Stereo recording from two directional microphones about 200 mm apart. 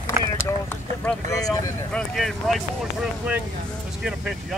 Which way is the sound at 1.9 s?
5° left (ahead or behind).